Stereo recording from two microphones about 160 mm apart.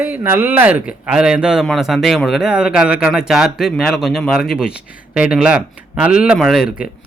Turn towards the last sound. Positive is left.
turn(degrees=0)  # may be behind; listen again after turning